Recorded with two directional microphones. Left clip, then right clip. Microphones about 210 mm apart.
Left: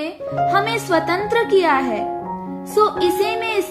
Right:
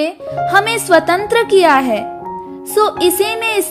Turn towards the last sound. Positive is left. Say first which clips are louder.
# right 4 dB
turn(degrees=-45)  # may be behind; listen again after turning